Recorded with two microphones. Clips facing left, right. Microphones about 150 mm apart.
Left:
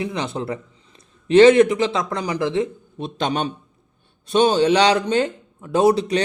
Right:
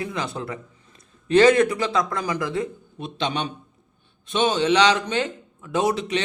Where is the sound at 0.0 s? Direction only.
25° left (ahead or behind).